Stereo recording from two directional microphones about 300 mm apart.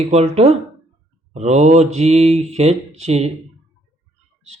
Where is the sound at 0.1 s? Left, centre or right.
Right.